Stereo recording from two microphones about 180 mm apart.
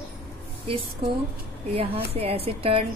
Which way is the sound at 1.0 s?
30° right (ahead or behind).